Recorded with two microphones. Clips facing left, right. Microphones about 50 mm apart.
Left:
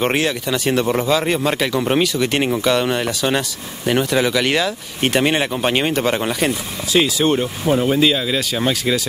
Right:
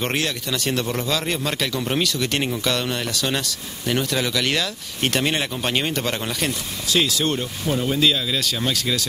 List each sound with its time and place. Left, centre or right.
0.0 s speech: centre